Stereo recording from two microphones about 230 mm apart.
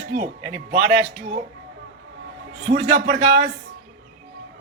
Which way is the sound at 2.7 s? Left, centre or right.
Right.